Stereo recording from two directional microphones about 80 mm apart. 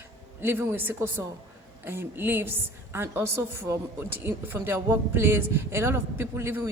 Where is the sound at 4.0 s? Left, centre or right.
Right.